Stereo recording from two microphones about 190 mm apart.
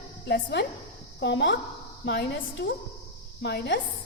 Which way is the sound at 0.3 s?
45° left (ahead or behind).